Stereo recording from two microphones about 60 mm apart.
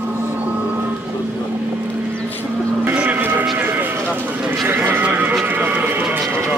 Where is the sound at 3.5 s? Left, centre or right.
Right.